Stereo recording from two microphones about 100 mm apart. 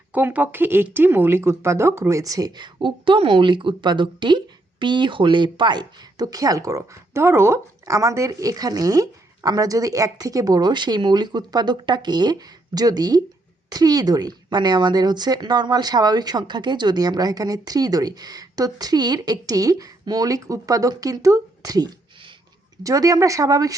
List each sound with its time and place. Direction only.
0.1 s speech: 15° right (ahead or behind); by 23.7 s 35° right (ahead or behind)